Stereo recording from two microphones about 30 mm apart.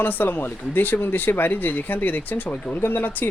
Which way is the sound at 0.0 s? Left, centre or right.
Left.